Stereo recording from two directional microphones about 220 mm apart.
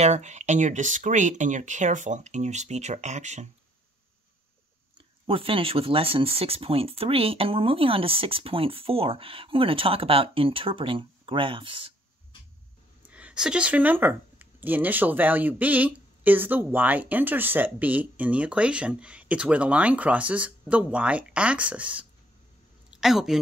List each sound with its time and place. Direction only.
0.0 s speech: 30° right (ahead or behind)
4.9 s speech: 25° right (ahead or behind)
13.1 s a woman's voice: 5° right (ahead or behind)